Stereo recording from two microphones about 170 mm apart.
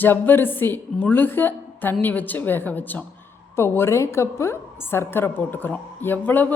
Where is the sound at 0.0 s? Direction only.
10° left (ahead or behind).